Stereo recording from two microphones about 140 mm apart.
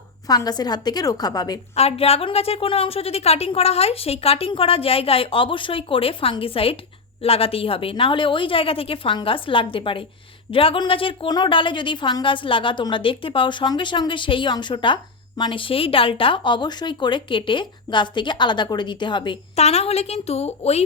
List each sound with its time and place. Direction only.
0.3 s a woman's voice: 30° left (ahead or behind)
1.7 s a woman's voice: 45° left (ahead or behind)
19.5 s a woman's voice: 50° left (ahead or behind)